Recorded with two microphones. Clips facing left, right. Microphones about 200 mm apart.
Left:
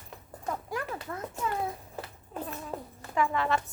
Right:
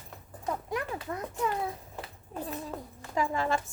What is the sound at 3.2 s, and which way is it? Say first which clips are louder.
Speech: left 1 dB; 40° right (ahead or behind).